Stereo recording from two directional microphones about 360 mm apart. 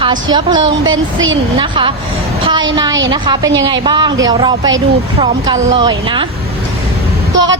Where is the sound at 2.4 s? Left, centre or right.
Centre.